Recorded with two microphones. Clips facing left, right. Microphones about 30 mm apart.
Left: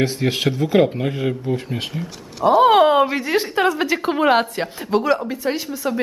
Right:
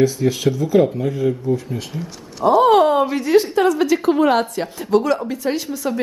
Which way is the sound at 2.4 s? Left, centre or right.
Centre.